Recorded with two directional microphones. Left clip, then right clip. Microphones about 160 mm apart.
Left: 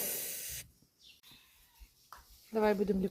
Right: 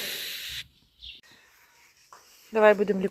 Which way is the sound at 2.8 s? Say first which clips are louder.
Right 7 dB; 20° left (ahead or behind).